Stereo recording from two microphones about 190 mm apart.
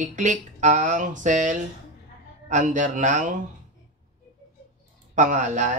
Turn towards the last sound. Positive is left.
turn(degrees=-40)  # may be behind; listen again after turning